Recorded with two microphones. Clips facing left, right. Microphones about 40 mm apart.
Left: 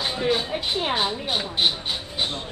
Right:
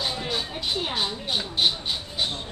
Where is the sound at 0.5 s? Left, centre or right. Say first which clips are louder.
Left 4 dB; left.